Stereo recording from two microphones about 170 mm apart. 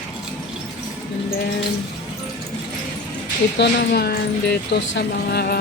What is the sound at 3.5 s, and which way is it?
Speech, 75° left (ahead or behind).